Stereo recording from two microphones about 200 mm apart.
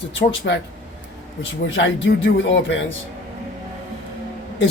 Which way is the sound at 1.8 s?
65° left (ahead or behind).